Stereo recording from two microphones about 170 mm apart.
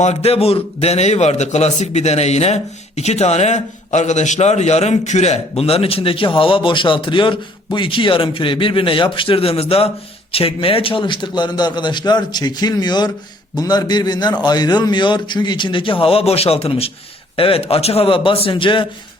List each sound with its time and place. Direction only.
0.0 s a man's voice: 40° left (ahead or behind)